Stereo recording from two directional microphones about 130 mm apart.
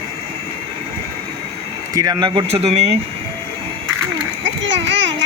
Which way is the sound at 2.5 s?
55° right (ahead or behind).